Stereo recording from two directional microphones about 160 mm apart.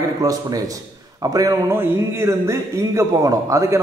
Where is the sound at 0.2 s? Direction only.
20° right (ahead or behind).